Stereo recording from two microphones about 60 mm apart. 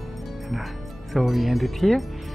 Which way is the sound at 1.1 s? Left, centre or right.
Centre.